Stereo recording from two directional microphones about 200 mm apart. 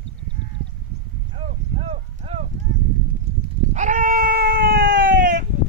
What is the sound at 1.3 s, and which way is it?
Cattle, 30° right (ahead or behind).